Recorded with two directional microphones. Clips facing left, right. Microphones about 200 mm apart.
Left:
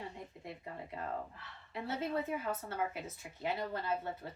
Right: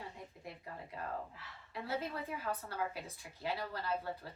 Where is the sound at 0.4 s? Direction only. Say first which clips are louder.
Left 2 dB; 20° left (ahead or behind).